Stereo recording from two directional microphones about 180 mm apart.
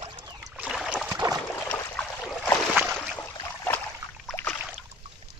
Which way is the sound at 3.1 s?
10° left (ahead or behind).